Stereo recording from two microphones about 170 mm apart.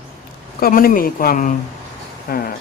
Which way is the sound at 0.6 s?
55° left (ahead or behind).